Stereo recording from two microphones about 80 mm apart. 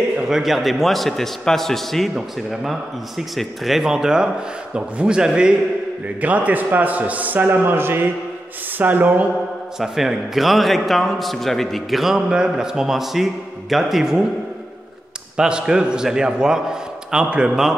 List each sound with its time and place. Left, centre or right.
0.2 s a man's voice: centre; by 9.3 s right
9.8 s a man's voice: centre
15.3 s a man's voice: centre